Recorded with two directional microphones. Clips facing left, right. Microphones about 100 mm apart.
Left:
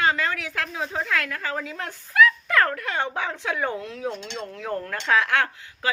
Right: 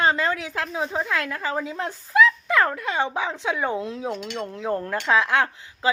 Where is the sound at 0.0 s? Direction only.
30° right (ahead or behind).